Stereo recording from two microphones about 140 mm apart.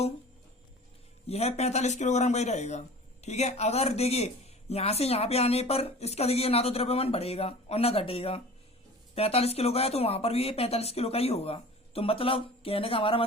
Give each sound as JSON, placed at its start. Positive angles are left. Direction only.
{"t": 1.3, "sound": "speech", "side_deg": 50}